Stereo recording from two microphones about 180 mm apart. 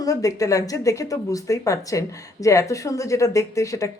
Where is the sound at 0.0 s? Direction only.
20° left (ahead or behind).